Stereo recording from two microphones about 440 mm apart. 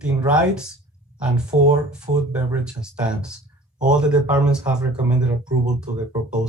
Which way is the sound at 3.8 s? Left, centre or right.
Centre.